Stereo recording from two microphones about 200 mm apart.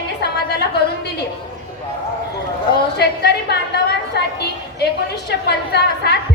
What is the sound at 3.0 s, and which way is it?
Speech, 55° left (ahead or behind).